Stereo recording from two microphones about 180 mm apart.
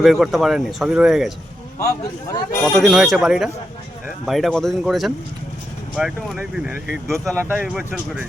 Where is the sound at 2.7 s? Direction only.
Centre (ahead or behind).